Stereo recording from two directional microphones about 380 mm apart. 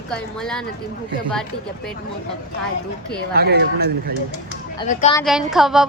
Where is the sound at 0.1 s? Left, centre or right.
Centre.